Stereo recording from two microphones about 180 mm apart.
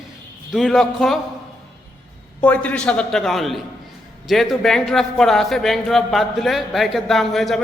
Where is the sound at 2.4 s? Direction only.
10° left (ahead or behind).